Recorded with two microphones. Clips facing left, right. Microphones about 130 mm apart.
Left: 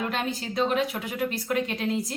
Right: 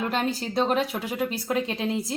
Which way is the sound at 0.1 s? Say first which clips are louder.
Right 3 dB; 35° right (ahead or behind).